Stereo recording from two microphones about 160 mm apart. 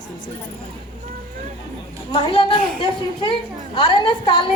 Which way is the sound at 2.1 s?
30° left (ahead or behind).